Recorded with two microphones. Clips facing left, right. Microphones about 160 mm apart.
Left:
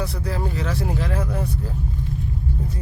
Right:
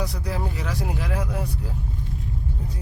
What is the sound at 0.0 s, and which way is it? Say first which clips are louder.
Speech: left 2 dB; 15° right (ahead or behind).